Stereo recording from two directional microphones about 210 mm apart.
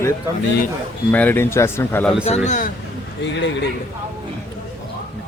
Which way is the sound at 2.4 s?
35° left (ahead or behind).